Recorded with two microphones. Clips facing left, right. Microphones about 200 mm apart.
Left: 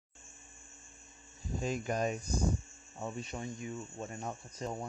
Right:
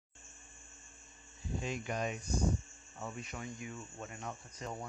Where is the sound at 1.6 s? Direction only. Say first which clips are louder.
Left 5 dB; 40° left (ahead or behind).